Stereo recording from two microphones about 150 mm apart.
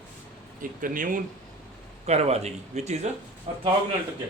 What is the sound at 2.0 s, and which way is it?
A man's voice, 45° right (ahead or behind).